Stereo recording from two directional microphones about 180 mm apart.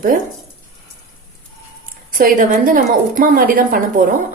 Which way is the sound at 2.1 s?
50° right (ahead or behind).